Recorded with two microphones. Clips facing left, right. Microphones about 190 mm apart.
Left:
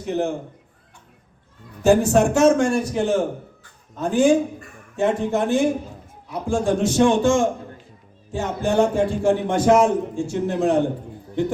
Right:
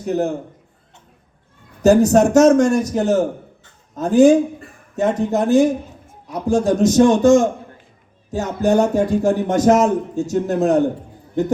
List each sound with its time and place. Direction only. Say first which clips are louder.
0.0 s speech: right 3 dB; 40° right (ahead or behind)
1.8 s a man's voice: right 4 dB; 40° right (ahead or behind)